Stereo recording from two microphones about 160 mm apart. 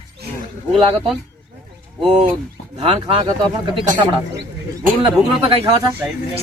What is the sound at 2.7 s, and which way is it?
Speech, 35° right (ahead or behind).